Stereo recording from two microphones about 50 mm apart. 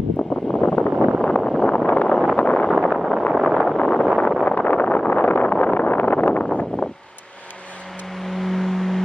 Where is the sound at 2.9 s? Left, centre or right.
Centre.